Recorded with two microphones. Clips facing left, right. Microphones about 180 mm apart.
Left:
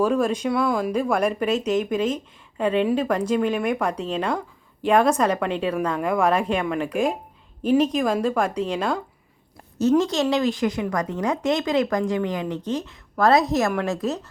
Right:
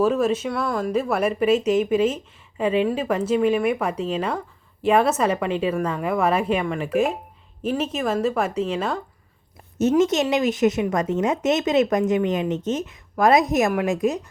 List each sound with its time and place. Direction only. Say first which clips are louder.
0.0 s a woman's voice: right 1 dB; 5° right (ahead or behind)
0.5 s speech: left 2 dB; 10° left (ahead or behind)
0.9 s a woman's voice: even; 5° right (ahead or behind)
10.0 s speech: right 2 dB; 20° right (ahead or behind)